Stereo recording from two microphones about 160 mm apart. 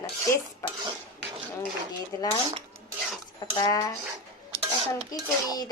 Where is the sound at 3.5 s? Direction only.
25° left (ahead or behind).